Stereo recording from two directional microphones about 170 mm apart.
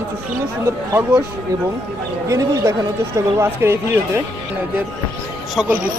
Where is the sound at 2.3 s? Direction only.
20° right (ahead or behind).